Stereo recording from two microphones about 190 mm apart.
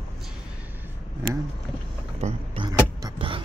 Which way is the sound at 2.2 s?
35° right (ahead or behind).